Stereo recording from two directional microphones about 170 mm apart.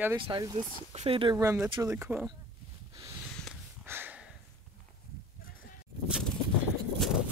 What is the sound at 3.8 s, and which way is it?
Snort, 10° right (ahead or behind).